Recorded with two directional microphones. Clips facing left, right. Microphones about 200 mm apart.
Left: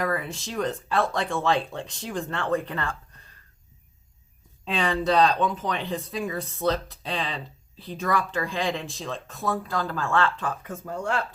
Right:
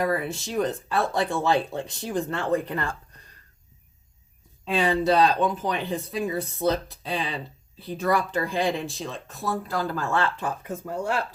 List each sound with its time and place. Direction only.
0.0 s speech: 5° right (ahead or behind)
4.7 s speech: 5° right (ahead or behind)